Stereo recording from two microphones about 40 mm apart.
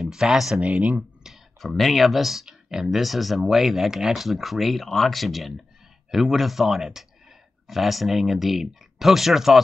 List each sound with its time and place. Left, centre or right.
0.1 s speech: centre
0.6 s speech: right
1.6 s speech: centre